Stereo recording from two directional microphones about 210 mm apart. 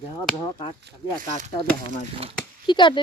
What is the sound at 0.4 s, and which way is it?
Speech, 25° left (ahead or behind).